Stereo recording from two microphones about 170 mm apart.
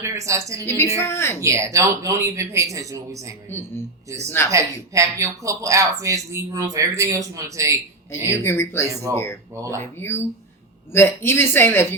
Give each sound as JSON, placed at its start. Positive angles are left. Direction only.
{"t": 0.0, "sound": "speech", "side_deg": -15}
{"t": 0.9, "sound": "speech", "side_deg": 15}
{"t": 1.4, "sound": "speech", "side_deg": -15}
{"t": 4.3, "sound": "speech", "side_deg": 15}
{"t": 4.5, "sound": "speech", "side_deg": -20}
{"t": 8.3, "sound": "speech", "side_deg": 15}